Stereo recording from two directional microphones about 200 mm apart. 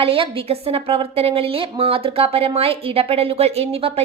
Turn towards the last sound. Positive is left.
turn(degrees=-30)  # may be behind; listen again after turning